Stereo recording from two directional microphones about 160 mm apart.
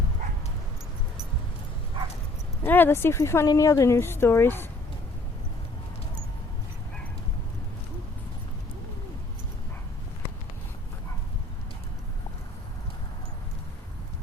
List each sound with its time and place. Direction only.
2.6 s speech: 10° left (ahead or behind)